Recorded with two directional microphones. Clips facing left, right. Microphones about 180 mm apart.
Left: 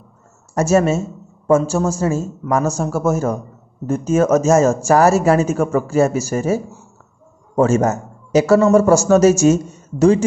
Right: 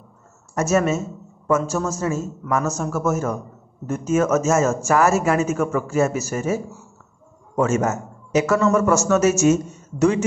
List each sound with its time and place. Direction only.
0.6 s speech: 30° left (ahead or behind)